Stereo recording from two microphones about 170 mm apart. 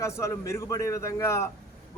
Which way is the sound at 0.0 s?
15° left (ahead or behind).